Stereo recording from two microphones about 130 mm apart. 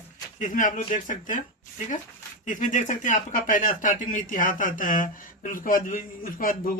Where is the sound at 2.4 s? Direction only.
80° left.